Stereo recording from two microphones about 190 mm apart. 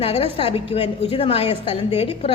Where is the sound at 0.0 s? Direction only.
30° left (ahead or behind).